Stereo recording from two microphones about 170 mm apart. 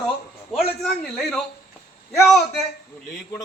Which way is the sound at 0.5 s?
Centre (ahead or behind).